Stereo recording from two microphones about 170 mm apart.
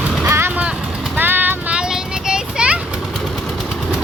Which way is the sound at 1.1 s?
10° right (ahead or behind).